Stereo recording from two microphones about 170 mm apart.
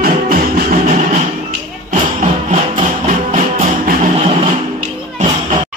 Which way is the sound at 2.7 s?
50° right (ahead or behind).